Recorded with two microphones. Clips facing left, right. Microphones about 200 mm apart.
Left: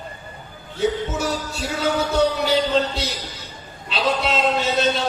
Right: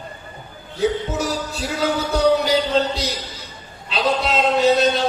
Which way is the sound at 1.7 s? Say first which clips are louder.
Left 1 dB; 35° right (ahead or behind).